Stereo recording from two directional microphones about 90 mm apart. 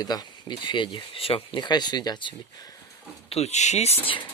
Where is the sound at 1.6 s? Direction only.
55° left (ahead or behind).